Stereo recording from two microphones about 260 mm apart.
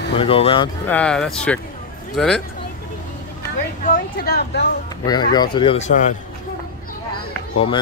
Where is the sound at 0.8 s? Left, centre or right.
Centre.